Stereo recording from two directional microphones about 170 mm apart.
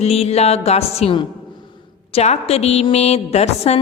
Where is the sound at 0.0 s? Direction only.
35° left (ahead or behind).